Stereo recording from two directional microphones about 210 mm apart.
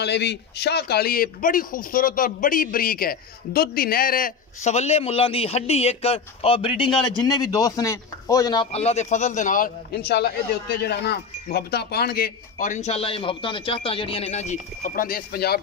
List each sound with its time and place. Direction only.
0.0 s speech: 55° left (ahead or behind); by 8.6 s 15° left (ahead or behind)
8.7 s a man's voice: 30° left (ahead or behind); by 15.6 s 50° left (ahead or behind)